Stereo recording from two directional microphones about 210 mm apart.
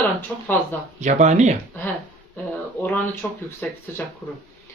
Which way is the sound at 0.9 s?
35° right (ahead or behind).